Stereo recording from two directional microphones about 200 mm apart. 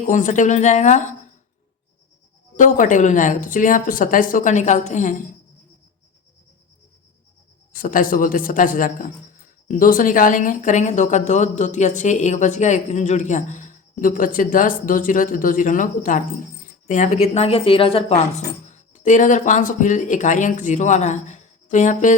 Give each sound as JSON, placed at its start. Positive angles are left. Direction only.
{"t": 0.1, "sound": "a woman's voice", "side_deg": 40}
{"t": 2.6, "sound": "a woman's voice", "side_deg": 40}
{"t": 7.7, "sound": "a woman's voice", "side_deg": 45}